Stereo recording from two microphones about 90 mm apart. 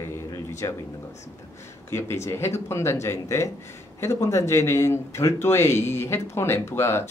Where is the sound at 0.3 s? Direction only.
35° left (ahead or behind).